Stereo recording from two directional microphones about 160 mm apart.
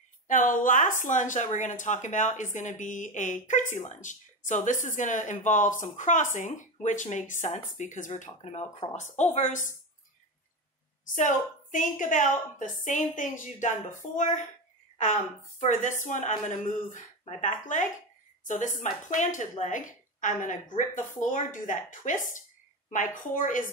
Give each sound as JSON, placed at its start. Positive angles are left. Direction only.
{"t": 0.3, "sound": "a woman's voice", "side_deg": 55}
{"t": 11.1, "sound": "a woman's voice", "side_deg": 50}